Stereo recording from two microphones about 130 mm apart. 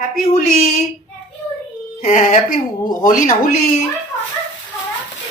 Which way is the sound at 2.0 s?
70° left (ahead or behind).